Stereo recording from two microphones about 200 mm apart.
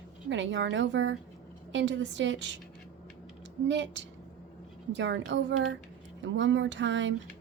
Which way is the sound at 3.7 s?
65° right (ahead or behind).